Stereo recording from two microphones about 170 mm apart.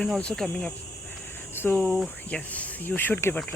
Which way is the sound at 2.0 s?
10° left (ahead or behind).